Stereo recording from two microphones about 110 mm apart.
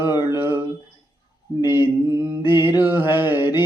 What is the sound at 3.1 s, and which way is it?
Mantra, 20° right (ahead or behind).